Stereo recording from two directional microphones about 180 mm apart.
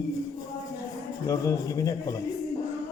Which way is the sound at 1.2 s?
20° left (ahead or behind).